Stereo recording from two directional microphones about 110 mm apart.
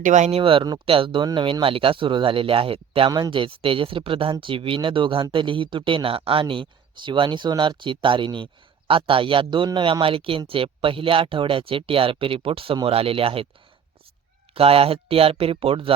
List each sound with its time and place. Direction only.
0.2 s speech: 65° right (ahead or behind)
3.1 s speech: 45° right (ahead or behind)
14.5 s speech: 60° right (ahead or behind)